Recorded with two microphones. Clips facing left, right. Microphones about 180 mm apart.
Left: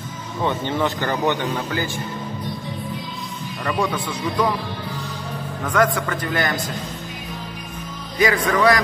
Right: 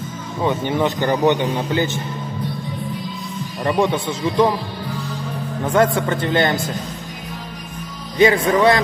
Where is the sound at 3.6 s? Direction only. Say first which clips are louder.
Right 5 dB; 25° right (ahead or behind).